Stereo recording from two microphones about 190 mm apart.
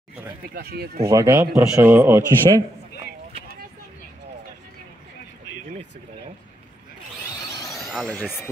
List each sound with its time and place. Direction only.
0.6 s speech: 55° right (ahead or behind)
1.0 s a man's voice: 15° right (ahead or behind)
3.3 s vehicle: 30° right (ahead or behind)
7.7 s a sound: centre (ahead or behind)